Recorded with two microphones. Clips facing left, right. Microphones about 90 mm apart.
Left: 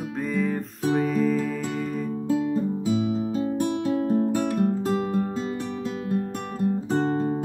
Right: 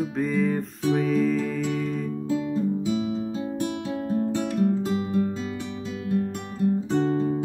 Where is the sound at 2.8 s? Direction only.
40° left (ahead or behind).